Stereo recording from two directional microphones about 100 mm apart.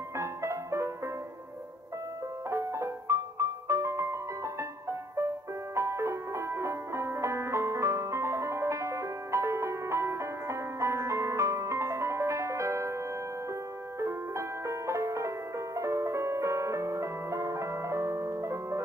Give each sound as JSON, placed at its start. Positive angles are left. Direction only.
{"t": 0.2, "sound": "music", "side_deg": -30}
{"t": 2.5, "sound": "music", "side_deg": -30}
{"t": 5.8, "sound": "music", "side_deg": -30}
{"t": 13.9, "sound": "music", "side_deg": -30}